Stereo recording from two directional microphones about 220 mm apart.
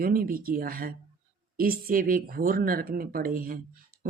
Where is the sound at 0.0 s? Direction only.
40° right (ahead or behind).